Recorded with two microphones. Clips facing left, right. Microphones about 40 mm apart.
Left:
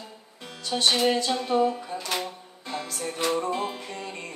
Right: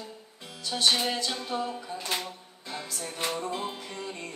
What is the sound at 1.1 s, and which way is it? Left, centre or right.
Music, left.